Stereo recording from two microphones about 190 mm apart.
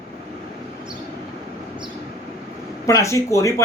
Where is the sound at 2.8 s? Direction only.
15° left (ahead or behind).